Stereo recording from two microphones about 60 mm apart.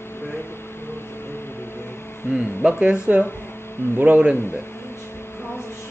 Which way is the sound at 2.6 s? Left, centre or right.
Centre.